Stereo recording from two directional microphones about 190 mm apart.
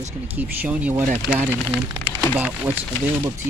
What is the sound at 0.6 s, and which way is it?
Speech, 10° right (ahead or behind).